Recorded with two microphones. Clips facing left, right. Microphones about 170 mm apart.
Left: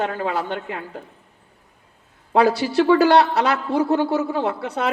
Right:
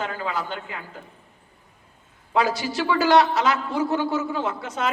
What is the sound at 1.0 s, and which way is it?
Speech, 35° left (ahead or behind).